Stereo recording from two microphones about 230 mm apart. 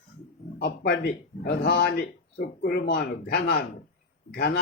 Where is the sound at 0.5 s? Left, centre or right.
Left.